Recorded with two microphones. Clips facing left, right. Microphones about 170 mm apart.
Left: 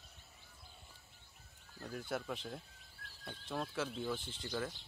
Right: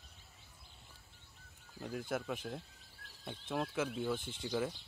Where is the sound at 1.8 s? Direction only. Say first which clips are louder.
Right 2 dB; 5° right (ahead or behind).